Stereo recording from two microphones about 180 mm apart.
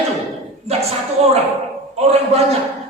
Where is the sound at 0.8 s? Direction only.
35° right (ahead or behind).